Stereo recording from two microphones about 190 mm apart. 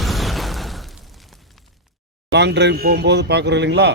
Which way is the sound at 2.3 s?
65° right (ahead or behind).